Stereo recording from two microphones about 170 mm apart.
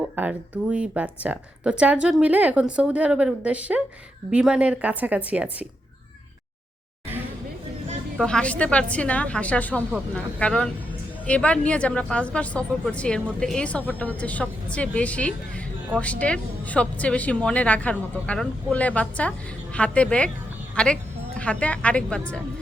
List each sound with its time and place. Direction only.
0.2 s a woman's voice: 10° right (ahead or behind)
8.2 s a woman's voice: 5° left (ahead or behind)